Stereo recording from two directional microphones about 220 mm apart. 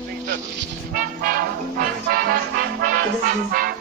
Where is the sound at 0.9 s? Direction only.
40° right (ahead or behind).